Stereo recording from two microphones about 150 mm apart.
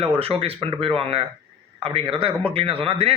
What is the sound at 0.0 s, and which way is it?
A man's voice, 40° right (ahead or behind).